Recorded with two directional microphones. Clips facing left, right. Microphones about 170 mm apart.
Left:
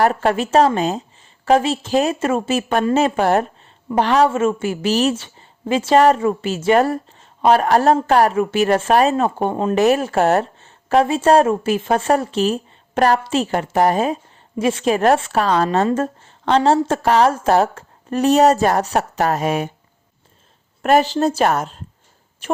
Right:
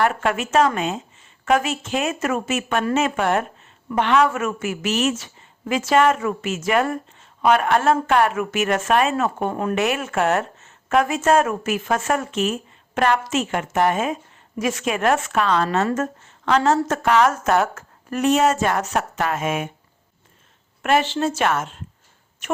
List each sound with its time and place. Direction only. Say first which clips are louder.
0.0 s a woman's voice: left 4 dB; 35° left (ahead or behind)
9.7 s a woman's voice: left 9 dB; 35° left (ahead or behind)
20.8 s a woman's voice: left 5 dB; 40° left (ahead or behind)